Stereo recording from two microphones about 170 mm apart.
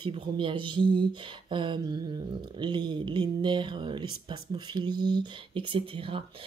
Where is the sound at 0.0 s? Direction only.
30° right (ahead or behind).